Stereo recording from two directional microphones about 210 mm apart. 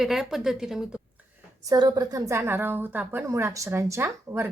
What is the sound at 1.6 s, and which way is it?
A woman's voice, 20° right (ahead or behind).